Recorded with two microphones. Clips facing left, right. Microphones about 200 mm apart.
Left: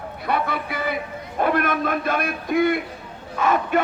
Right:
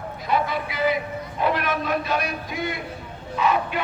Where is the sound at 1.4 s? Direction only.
50° left (ahead or behind).